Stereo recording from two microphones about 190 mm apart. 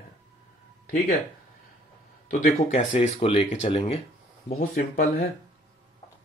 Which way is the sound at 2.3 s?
45° left (ahead or behind).